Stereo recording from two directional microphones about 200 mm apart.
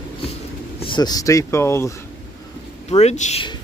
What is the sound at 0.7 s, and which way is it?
Speech, 25° left (ahead or behind).